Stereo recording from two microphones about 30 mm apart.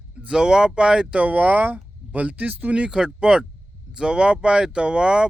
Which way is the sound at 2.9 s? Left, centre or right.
Right.